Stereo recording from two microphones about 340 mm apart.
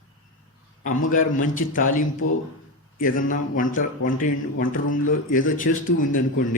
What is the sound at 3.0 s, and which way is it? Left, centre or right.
A man's voice, left.